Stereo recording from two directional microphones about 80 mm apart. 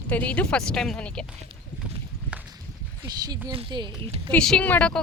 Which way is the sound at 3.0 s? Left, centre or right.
Right.